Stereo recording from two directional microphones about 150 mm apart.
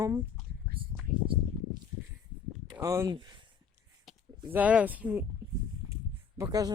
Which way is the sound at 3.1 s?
30° right (ahead or behind).